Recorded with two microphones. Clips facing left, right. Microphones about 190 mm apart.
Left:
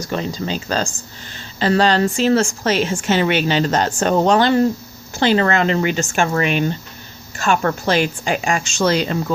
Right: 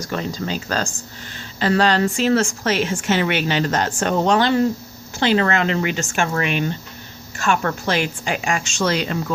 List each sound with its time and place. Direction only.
0.0 s a woman's voice: 20° left (ahead or behind)